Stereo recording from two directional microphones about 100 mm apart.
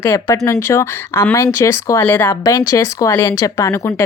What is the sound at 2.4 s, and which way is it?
Speech, 35° left (ahead or behind).